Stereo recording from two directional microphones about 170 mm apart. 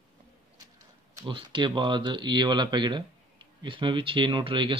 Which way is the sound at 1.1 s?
30° right (ahead or behind).